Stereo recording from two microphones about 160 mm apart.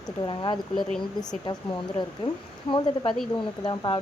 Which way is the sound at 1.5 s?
25° left (ahead or behind).